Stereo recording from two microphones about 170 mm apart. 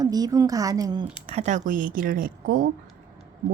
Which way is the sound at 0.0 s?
20° right (ahead or behind).